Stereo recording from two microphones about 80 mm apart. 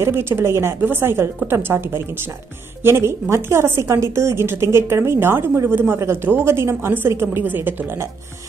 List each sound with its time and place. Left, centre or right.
0.0 s a woman's voice: right